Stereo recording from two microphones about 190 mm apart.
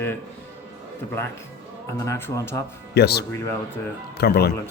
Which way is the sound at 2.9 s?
60° left (ahead or behind).